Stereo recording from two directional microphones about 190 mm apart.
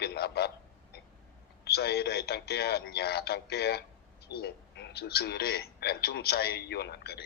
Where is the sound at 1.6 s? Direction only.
60° left (ahead or behind).